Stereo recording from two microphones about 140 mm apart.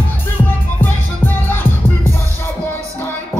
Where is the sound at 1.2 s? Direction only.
15° left (ahead or behind).